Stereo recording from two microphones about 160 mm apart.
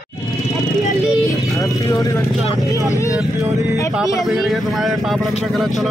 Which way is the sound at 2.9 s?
20° left (ahead or behind).